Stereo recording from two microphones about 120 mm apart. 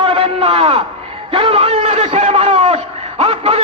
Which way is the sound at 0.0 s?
50° right (ahead or behind).